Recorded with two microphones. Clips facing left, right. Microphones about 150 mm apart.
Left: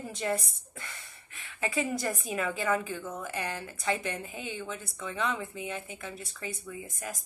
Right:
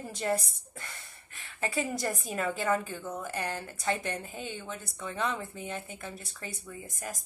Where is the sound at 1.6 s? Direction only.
40° right (ahead or behind).